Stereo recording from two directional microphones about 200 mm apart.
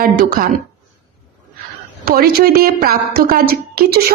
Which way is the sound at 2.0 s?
50° right (ahead or behind).